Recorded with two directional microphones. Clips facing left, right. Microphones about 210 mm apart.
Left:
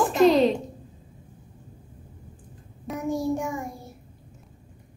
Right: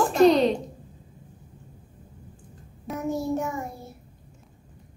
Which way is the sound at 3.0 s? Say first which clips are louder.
Left 1 dB; 15° left (ahead or behind).